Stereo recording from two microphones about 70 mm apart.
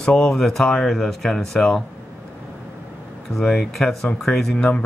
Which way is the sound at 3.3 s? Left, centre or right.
Centre.